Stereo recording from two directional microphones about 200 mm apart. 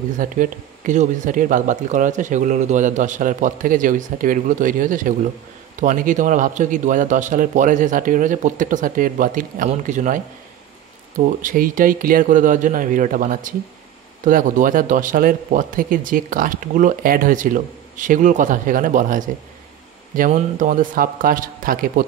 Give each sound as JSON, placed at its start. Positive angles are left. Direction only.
{"t": 0.2, "sound": "speech", "side_deg": -40}